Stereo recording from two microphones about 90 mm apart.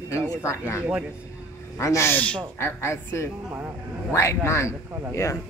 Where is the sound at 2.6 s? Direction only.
30° left (ahead or behind).